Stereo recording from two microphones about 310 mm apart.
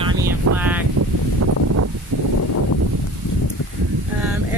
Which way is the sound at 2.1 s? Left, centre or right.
Right.